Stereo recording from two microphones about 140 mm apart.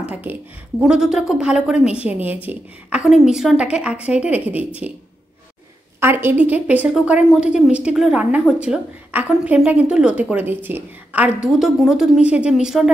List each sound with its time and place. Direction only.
0.0 s a woman's voice: 10° right (ahead or behind)
5.9 s a woman's voice: 15° right (ahead or behind)